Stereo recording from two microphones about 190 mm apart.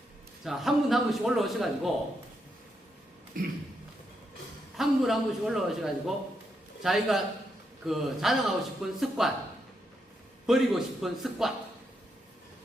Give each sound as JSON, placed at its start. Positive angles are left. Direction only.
{"t": 0.4, "sound": "speech", "side_deg": 0}
{"t": 3.3, "sound": "a sound", "side_deg": -45}
{"t": 4.8, "sound": "speech", "side_deg": 0}
{"t": 10.4, "sound": "speech", "side_deg": 0}